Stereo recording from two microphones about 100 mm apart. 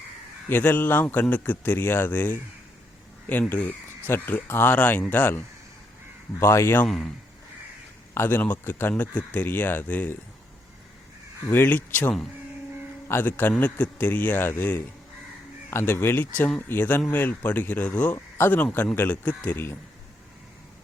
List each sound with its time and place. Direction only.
0.4 s speech: 20° left (ahead or behind)
3.5 s speech: 20° left (ahead or behind)
6.4 s speech: 25° left (ahead or behind)
6.8 s speech: 5° left (ahead or behind)
8.1 s speech: 25° left (ahead or behind)
11.4 s speech: 20° left (ahead or behind)